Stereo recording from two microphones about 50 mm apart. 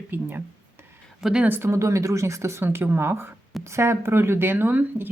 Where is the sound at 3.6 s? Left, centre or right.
Right.